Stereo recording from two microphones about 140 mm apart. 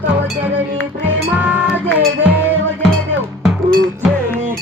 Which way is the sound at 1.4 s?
10° right (ahead or behind).